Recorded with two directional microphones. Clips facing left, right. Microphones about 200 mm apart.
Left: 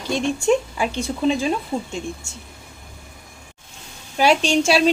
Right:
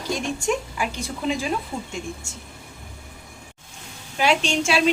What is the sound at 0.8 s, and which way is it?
Speech, 30° left (ahead or behind).